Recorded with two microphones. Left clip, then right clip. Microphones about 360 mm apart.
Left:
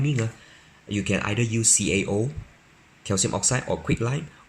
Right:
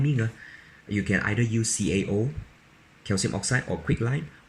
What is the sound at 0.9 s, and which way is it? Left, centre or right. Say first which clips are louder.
Speech: even; centre.